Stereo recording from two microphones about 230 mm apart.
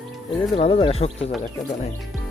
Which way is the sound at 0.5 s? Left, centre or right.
Left.